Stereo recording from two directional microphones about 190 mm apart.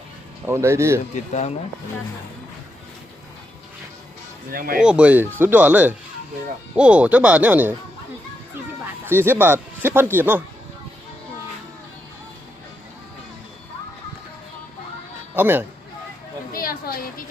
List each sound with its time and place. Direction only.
0.4 s speech: 15° right (ahead or behind)
1.1 s speech: 40° left (ahead or behind)
4.5 s speech: 50° right (ahead or behind)
4.8 s speech: 5° right (ahead or behind)
8.8 s speech: 10° right (ahead or behind)
15.4 s speech: 10° right (ahead or behind)
16.5 s a sound: 50° left (ahead or behind)